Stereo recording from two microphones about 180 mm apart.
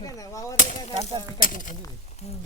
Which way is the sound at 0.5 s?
40° left (ahead or behind).